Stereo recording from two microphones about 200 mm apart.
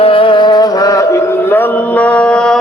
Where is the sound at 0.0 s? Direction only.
25° left (ahead or behind).